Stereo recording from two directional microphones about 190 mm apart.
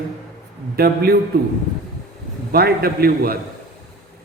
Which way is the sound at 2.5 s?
55° right (ahead or behind).